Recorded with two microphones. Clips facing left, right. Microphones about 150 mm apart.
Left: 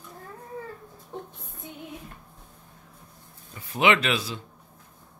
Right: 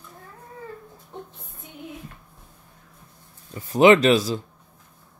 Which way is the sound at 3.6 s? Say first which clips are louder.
Right 8 dB; 40° right (ahead or behind).